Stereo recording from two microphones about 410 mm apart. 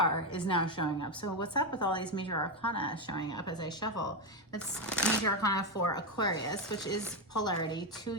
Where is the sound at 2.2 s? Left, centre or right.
Left.